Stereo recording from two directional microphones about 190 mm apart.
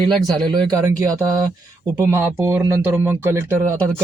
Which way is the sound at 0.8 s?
15° right (ahead or behind).